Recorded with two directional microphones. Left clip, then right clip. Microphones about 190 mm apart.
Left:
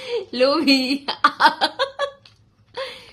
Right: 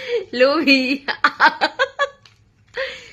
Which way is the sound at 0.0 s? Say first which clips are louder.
Right 3 dB; centre (ahead or behind).